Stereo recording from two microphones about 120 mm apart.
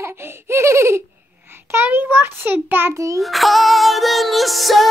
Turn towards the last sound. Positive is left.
turn(degrees=0)  # may be behind; listen again after turning